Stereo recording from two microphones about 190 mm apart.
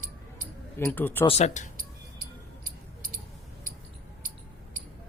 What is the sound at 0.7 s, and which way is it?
Speech, 10° left (ahead or behind).